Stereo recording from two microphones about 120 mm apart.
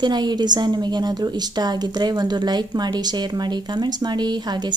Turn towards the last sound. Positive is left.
turn(degrees=-35)  # may be behind; listen again after turning